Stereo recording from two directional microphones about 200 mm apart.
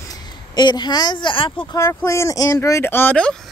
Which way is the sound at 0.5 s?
20° left (ahead or behind).